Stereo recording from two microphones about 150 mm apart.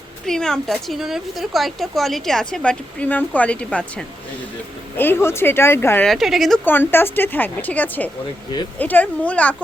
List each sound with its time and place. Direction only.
0.3 s a woman's voice: 5° left (ahead or behind)
6.1 s a woman's voice: centre (ahead or behind)
6.7 s a woman's voice: 15° left (ahead or behind)